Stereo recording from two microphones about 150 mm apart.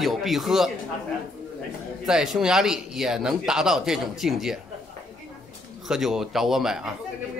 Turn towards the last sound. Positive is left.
turn(degrees=-5)  # may be behind; listen again after turning